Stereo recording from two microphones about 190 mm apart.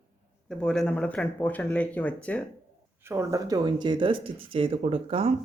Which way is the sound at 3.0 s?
15° right (ahead or behind).